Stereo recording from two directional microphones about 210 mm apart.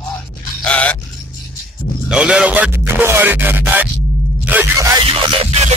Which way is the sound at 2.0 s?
5° right (ahead or behind).